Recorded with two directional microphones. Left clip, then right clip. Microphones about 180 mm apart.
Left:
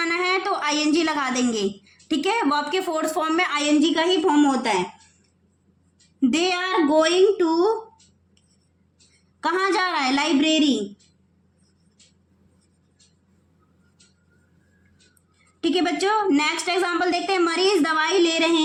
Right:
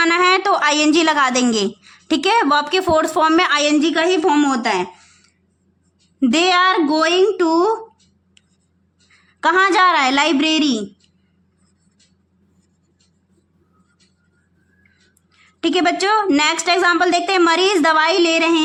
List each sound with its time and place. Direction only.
0.0 s a woman's voice: 50° right (ahead or behind)
6.1 s a woman's voice: 55° right (ahead or behind)
9.4 s a woman's voice: 45° right (ahead or behind)
15.6 s a woman's voice: 45° right (ahead or behind)